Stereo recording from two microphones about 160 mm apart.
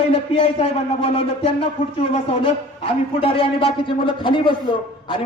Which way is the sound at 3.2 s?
35° left (ahead or behind).